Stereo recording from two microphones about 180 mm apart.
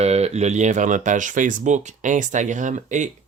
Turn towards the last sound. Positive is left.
turn(degrees=-45)  # may be behind; listen again after turning